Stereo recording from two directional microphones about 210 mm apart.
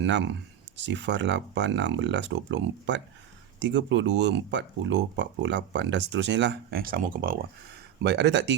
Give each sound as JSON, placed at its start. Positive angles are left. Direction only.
{"t": 0.0, "sound": "speech", "side_deg": -60}
{"t": 8.0, "sound": "speech", "side_deg": -55}